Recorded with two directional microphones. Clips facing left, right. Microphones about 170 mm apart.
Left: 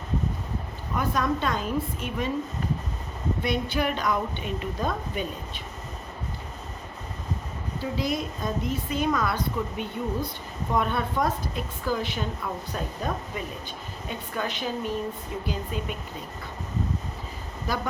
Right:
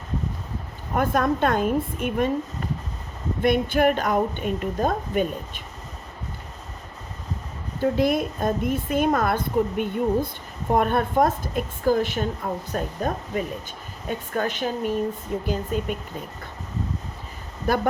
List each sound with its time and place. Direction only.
0.9 s a woman's voice: 55° right (ahead or behind)
3.4 s a woman's voice: 50° right (ahead or behind)
7.8 s a woman's voice: 55° right (ahead or behind)
17.7 s a woman's voice: 55° right (ahead or behind)